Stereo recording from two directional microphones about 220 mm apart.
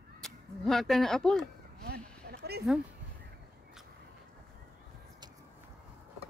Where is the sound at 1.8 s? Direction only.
45° right (ahead or behind).